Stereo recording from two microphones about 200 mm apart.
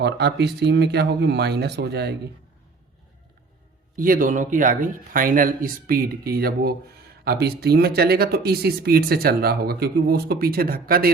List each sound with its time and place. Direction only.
0.0 s speech: 55° right (ahead or behind)
3.9 s speech: 45° right (ahead or behind)